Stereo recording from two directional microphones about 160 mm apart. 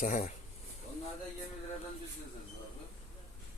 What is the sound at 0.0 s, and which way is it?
Speech, 55° left (ahead or behind).